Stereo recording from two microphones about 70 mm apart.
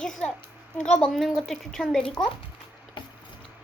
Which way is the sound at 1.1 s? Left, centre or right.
Centre.